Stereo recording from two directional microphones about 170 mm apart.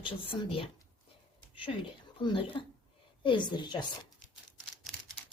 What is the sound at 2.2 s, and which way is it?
A woman's voice, 30° left (ahead or behind).